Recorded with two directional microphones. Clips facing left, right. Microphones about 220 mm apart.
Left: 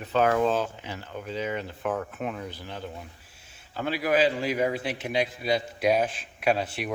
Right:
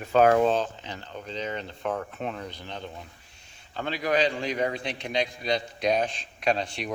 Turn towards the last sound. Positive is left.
turn(degrees=5)  # may be behind; listen again after turning